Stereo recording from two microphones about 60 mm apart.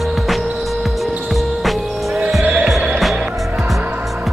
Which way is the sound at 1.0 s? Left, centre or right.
Centre.